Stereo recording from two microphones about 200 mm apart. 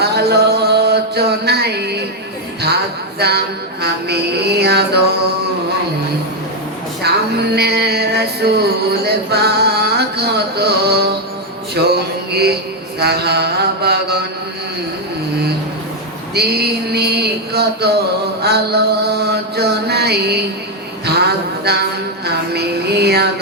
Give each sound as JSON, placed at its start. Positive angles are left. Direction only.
{"t": 0.0, "sound": "mantra", "side_deg": -55}
{"t": 3.2, "sound": "mantra", "side_deg": -55}
{"t": 7.0, "sound": "music", "side_deg": -55}
{"t": 11.7, "sound": "a sound", "side_deg": -55}
{"t": 13.0, "sound": "mantra", "side_deg": -55}
{"t": 16.3, "sound": "a sound", "side_deg": -55}
{"t": 18.4, "sound": "mantra", "side_deg": -55}
{"t": 21.2, "sound": "speech", "side_deg": -55}
{"t": 22.5, "sound": "music", "side_deg": -55}